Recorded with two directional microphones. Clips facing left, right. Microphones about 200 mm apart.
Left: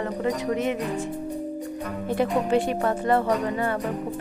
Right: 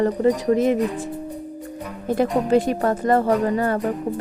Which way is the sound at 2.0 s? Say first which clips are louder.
Right 4 dB; 40° right (ahead or behind).